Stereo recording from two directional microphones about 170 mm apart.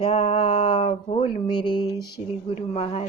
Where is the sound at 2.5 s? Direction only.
40° left (ahead or behind).